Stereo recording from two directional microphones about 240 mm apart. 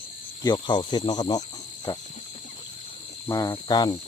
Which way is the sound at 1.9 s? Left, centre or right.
Centre.